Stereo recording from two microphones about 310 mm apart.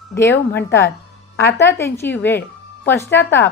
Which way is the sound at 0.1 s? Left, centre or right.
Centre.